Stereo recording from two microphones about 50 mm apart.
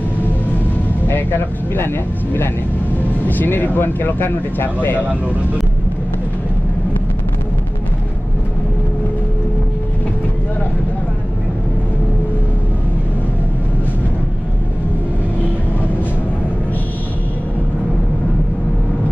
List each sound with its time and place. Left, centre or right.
1.0 s speech: left